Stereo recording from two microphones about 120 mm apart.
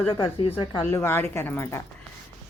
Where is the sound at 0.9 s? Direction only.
20° left (ahead or behind).